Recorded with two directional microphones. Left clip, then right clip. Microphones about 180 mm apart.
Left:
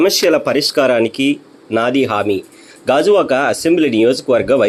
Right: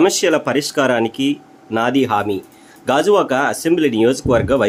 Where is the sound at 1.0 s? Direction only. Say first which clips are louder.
Left 3 dB; 40° right (ahead or behind).